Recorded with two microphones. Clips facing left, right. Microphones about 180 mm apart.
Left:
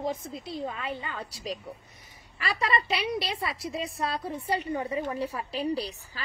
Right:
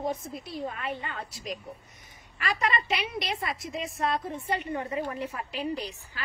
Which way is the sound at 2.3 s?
35° left (ahead or behind).